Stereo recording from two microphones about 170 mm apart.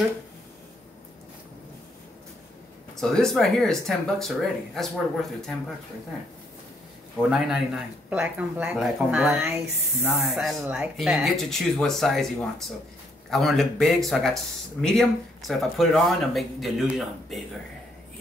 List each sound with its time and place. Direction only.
3.0 s speech: centre (ahead or behind)
7.2 s speech: 5° right (ahead or behind)